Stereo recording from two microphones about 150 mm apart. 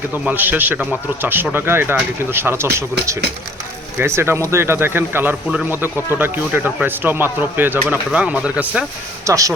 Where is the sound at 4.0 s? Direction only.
15° right (ahead or behind).